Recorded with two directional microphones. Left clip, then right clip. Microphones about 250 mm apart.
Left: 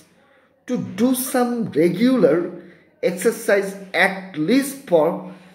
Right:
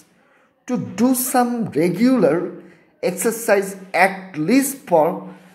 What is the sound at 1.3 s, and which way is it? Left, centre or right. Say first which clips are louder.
A woman's voice: even; right.